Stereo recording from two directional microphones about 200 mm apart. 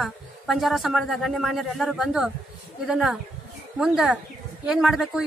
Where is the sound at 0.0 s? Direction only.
Centre (ahead or behind).